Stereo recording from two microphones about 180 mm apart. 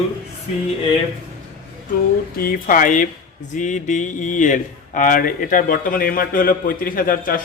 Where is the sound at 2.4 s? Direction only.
50° left (ahead or behind).